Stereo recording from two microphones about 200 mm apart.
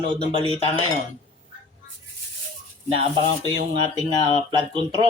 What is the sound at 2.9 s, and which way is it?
Speech, 30° right (ahead or behind).